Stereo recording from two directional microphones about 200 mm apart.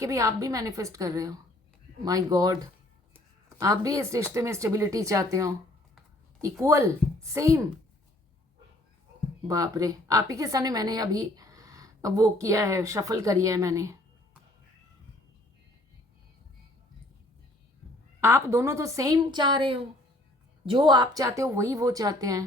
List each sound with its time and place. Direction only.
0.0 s a woman's voice: 15° right (ahead or behind)
9.5 s a woman's voice: 20° right (ahead or behind)
18.2 s a woman's voice: 10° right (ahead or behind)